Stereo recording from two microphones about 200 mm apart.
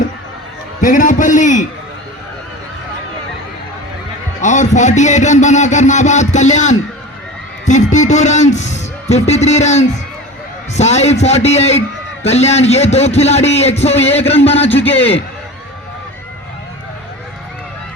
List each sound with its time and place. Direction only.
0.8 s a man's voice: 40° left (ahead or behind)
4.4 s a man's voice: 40° left (ahead or behind)